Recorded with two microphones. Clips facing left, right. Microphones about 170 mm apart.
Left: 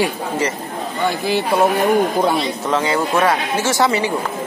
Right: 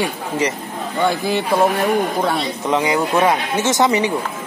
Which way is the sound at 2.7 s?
15° right (ahead or behind).